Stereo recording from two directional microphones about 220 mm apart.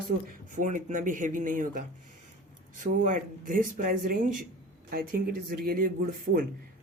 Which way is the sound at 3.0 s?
35° right (ahead or behind).